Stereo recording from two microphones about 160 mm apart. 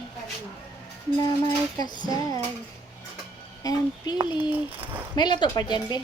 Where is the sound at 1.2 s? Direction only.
25° left (ahead or behind).